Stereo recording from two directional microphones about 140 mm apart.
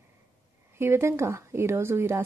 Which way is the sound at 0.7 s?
20° right (ahead or behind).